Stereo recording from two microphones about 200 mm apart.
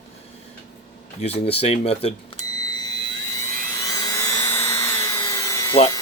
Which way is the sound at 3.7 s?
15° left (ahead or behind).